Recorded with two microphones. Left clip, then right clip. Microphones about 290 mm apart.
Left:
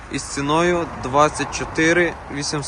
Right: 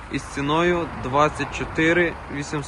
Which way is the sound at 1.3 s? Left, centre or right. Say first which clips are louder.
Left 3 dB; left.